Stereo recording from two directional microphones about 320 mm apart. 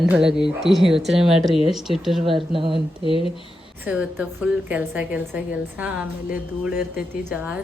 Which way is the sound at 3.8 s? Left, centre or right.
Centre.